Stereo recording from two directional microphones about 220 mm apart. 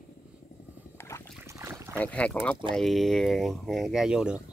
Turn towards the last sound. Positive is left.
turn(degrees=-5)  # may be behind; listen again after turning